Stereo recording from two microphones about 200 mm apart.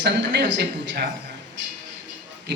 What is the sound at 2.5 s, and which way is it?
Speech, 60° right (ahead or behind).